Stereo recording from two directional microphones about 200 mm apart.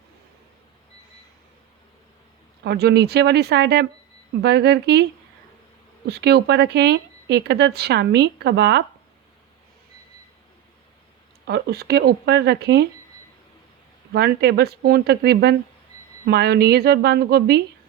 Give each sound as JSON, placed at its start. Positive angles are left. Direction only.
{"t": 2.6, "sound": "speech", "side_deg": -55}
{"t": 6.1, "sound": "speech", "side_deg": -55}
{"t": 11.4, "sound": "speech", "side_deg": -55}
{"t": 14.1, "sound": "speech", "side_deg": -55}